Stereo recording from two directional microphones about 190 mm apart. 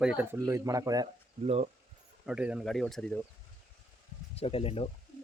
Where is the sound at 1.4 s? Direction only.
35° right (ahead or behind).